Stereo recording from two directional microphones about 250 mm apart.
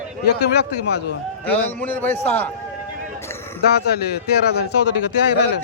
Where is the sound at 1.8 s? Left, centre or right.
Centre.